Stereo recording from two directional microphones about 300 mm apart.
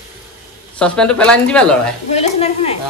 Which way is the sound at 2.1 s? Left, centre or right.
Left.